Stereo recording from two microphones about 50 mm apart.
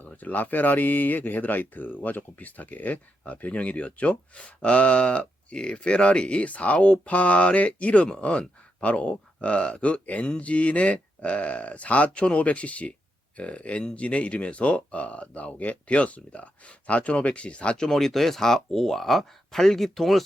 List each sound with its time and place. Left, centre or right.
0.0 s speech: left
17.8 s speech: centre